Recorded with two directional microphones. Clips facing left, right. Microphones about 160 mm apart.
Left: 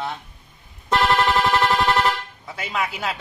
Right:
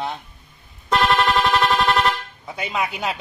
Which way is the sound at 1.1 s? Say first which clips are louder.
Even; 20° left (ahead or behind).